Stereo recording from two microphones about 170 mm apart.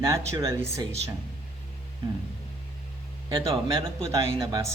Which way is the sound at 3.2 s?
30° right (ahead or behind).